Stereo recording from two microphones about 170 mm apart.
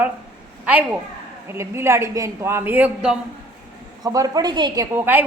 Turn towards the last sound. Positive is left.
turn(degrees=-10)  # may be behind; listen again after turning